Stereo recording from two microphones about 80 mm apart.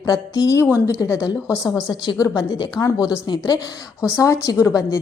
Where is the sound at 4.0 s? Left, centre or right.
Left.